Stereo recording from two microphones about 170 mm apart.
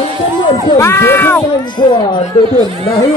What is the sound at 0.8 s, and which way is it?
Speech, 15° left (ahead or behind).